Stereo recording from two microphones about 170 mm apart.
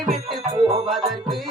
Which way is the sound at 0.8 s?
Centre (ahead or behind).